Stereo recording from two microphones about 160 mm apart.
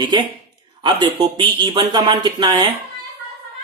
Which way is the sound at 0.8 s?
25° right (ahead or behind).